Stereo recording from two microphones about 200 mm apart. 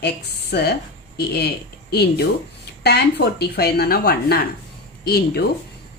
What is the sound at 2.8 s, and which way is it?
Speech, 55° left (ahead or behind).